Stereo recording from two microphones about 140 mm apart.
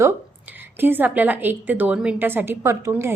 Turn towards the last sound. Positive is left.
turn(degrees=-20)  # may be behind; listen again after turning